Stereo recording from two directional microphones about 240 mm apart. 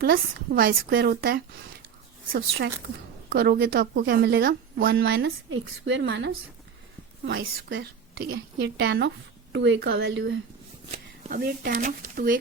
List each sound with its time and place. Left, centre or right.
0.0 s speech: right
3.2 s speech: right
4.9 s a woman's voice: right